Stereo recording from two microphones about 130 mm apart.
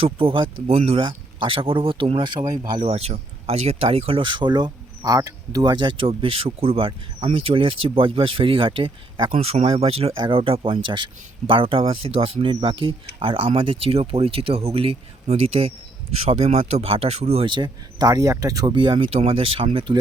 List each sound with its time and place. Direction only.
0.0 s speech: 45° right (ahead or behind)
2.8 s speech: 55° right (ahead or behind); by 18.7 s 25° right (ahead or behind)
18.7 s speech: 40° right (ahead or behind)